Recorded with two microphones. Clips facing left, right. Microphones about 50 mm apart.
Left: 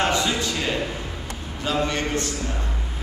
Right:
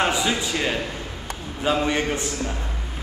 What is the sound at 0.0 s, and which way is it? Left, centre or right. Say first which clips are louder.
A man's voice: even; centre.